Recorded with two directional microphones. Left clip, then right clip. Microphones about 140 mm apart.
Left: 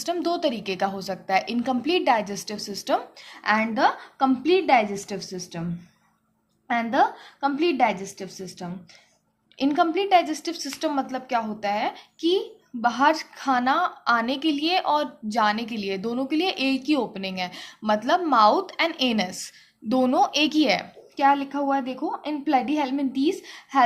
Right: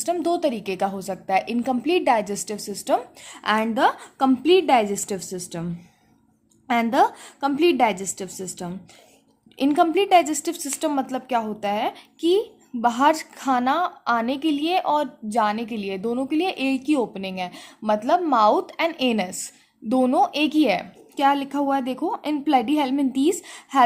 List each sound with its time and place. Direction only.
0.0 s a woman's voice: 45° right (ahead or behind)
6.7 s a woman's voice: 45° right (ahead or behind)